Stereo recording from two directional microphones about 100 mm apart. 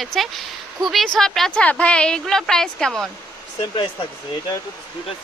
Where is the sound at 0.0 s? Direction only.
Centre (ahead or behind).